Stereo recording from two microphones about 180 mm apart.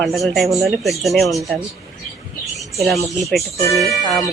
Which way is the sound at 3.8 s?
Centre (ahead or behind).